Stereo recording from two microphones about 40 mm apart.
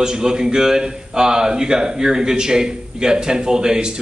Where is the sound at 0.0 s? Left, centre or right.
Centre.